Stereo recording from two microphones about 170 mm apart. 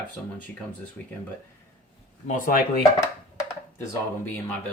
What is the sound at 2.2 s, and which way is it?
Speech, 50° left (ahead or behind).